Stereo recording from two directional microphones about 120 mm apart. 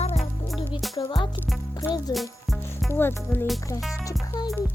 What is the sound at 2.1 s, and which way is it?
Music, 30° left (ahead or behind).